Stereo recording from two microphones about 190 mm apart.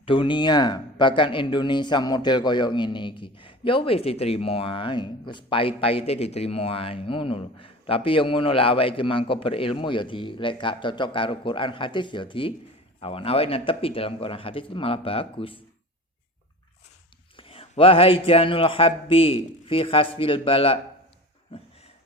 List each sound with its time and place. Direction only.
0.0 s speech: 25° left (ahead or behind)
17.3 s speech: 30° left (ahead or behind)